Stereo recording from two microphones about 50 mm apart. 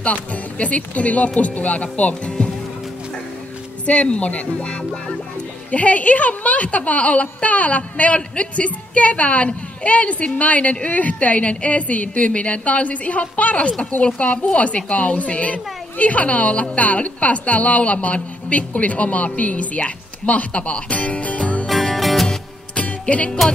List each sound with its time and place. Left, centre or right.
0.0 s a woman's voice: left
3.8 s a woman's voice: left
21.6 s music: centre
22.8 s music: left